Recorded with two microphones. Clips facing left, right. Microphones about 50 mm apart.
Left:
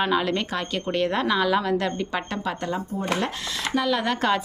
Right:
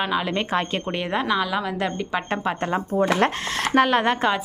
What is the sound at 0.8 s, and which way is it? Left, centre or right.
A woman's voice, centre.